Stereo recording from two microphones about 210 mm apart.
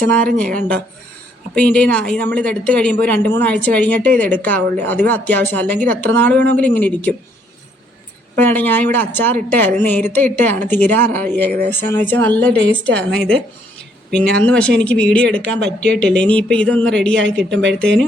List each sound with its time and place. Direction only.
0.0 s speech: 5° left (ahead or behind)
1.5 s speech: 5° left (ahead or behind)
8.4 s a woman's voice: 10° left (ahead or behind)
17.5 s speech: 60° right (ahead or behind)
17.7 s a woman's voice: 5° left (ahead or behind)